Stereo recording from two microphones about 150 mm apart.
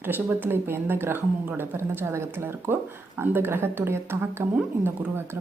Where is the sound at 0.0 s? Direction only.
10° right (ahead or behind).